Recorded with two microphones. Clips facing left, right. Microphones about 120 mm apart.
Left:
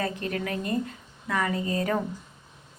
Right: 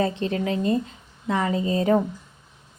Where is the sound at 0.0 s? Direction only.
25° right (ahead or behind).